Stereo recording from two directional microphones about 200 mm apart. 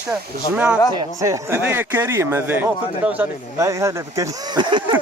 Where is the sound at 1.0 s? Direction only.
15° right (ahead or behind).